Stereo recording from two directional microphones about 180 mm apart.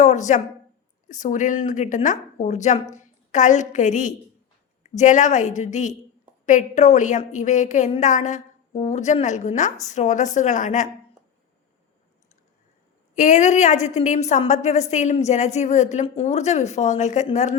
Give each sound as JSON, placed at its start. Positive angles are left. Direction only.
{"t": 0.0, "sound": "a woman's voice", "side_deg": 40}
{"t": 13.1, "sound": "a woman's voice", "side_deg": 40}